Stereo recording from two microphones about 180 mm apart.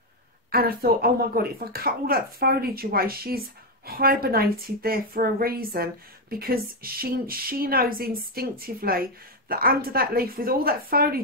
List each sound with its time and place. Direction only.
0.5 s speech: 55° right (ahead or behind)